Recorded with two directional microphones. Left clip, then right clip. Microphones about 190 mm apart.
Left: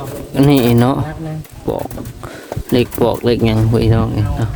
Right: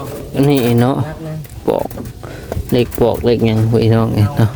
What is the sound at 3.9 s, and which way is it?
Speech, 20° right (ahead or behind).